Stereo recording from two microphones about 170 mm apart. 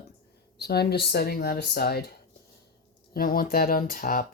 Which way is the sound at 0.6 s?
70° left (ahead or behind).